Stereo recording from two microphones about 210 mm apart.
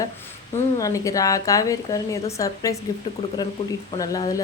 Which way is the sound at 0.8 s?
15° left (ahead or behind).